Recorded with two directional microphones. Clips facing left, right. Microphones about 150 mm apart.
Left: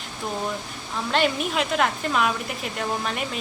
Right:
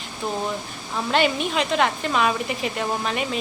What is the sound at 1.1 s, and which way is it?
A woman's voice, centre (ahead or behind).